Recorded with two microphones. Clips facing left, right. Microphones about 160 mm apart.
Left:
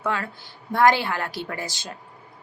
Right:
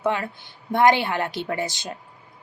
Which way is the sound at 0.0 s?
20° right (ahead or behind).